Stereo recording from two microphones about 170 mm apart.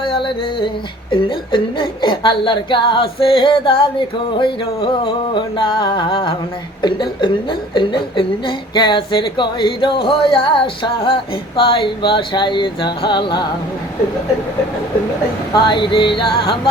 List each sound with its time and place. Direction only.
0.0 s music: 30° left (ahead or behind)
1.1 s speech: 30° left (ahead or behind)
15.5 s speech: 25° left (ahead or behind)